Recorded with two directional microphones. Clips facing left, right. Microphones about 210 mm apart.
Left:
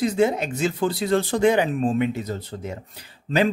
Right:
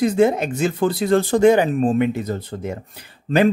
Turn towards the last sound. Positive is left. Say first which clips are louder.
# right 4 dB
turn(degrees=-55)  # may be behind; listen again after turning